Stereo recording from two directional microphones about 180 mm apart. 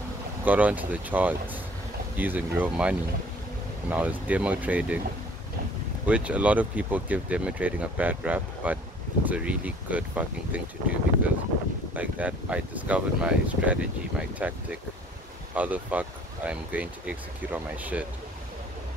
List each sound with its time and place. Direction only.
0.5 s speech: 10° right (ahead or behind)
6.0 s speech: 5° right (ahead or behind)